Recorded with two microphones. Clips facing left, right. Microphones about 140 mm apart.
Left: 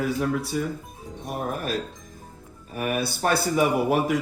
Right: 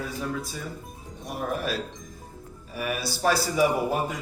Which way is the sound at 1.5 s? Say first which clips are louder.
Left 1 dB; 50° left (ahead or behind).